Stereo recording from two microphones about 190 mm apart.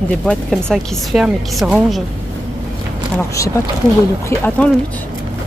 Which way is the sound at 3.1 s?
15° left (ahead or behind).